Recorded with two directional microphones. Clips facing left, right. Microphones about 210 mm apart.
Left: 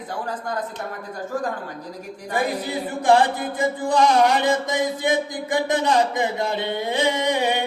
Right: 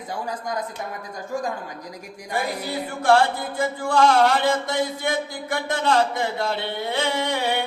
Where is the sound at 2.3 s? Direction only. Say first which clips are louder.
Left 2 dB; 15° left (ahead or behind).